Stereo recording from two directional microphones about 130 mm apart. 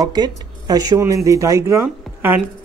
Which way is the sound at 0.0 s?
30° right (ahead or behind).